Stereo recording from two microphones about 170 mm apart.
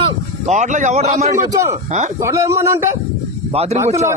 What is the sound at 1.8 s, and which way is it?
Speech, 45° right (ahead or behind).